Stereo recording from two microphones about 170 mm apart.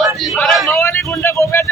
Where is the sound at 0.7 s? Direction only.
15° left (ahead or behind).